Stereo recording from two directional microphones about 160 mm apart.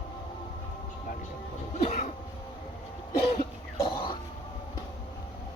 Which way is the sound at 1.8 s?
45° left (ahead or behind).